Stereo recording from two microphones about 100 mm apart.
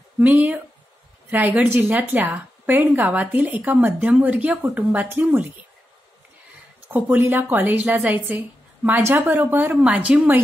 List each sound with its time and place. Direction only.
0.2 s a woman's voice: 15° right (ahead or behind)
6.9 s a woman's voice: 20° right (ahead or behind)